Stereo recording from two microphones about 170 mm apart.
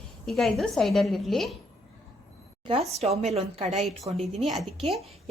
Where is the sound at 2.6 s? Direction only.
35° right (ahead or behind).